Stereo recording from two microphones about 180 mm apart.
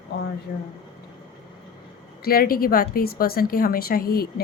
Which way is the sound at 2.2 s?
55° left (ahead or behind).